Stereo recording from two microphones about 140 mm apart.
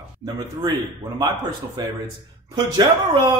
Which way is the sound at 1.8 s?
25° right (ahead or behind).